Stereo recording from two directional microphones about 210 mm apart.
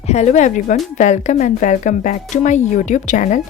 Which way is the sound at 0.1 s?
35° left (ahead or behind).